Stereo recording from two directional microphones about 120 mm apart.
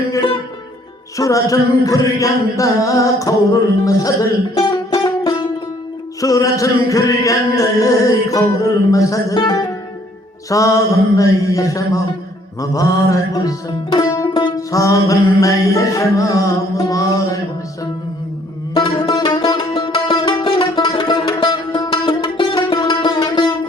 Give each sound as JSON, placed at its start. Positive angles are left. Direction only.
{"t": 1.1, "sound": "music", "side_deg": 25}
{"t": 4.5, "sound": "music", "side_deg": 40}
{"t": 8.9, "sound": "music", "side_deg": 30}
{"t": 18.7, "sound": "music", "side_deg": 45}